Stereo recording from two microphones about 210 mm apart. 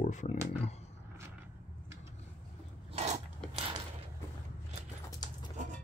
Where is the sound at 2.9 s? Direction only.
30° right (ahead or behind).